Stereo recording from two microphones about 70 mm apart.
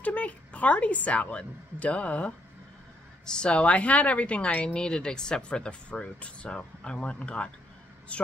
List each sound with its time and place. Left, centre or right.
0.0 s a woman's voice: left